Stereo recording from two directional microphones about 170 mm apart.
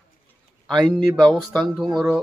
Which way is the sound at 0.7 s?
Centre (ahead or behind).